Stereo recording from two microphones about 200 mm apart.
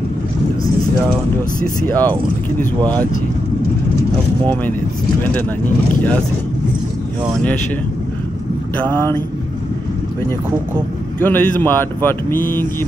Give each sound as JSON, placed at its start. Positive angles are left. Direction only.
{"t": 1.9, "sound": "speech", "side_deg": 10}
{"t": 2.8, "sound": "speech", "side_deg": -20}
{"t": 11.2, "sound": "speech", "side_deg": 10}